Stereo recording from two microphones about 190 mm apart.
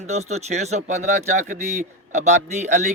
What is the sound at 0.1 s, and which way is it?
Speech, 35° right (ahead or behind).